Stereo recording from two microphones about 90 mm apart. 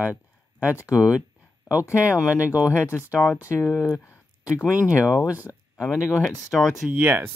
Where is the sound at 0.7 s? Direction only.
35° left (ahead or behind).